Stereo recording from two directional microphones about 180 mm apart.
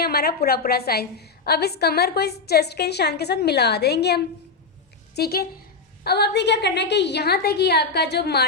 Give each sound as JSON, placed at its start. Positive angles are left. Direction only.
{"t": 0.0, "sound": "a woman's voice", "side_deg": 60}